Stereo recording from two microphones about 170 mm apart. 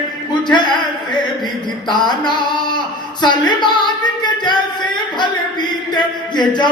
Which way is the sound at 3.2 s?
25° left (ahead or behind).